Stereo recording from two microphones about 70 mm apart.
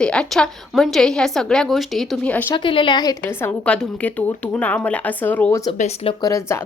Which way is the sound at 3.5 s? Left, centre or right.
Centre.